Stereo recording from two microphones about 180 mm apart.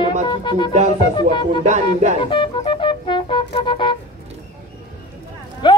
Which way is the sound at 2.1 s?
25° left (ahead or behind).